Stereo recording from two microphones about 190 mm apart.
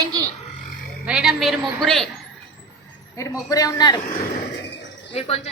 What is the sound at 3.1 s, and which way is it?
Speech, 15° left (ahead or behind).